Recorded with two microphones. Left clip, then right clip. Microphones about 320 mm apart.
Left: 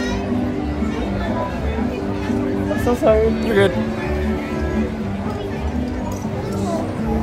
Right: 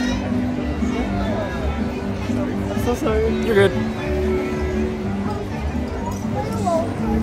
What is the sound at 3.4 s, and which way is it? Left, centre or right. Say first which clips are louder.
Speech: right 3 dB; centre.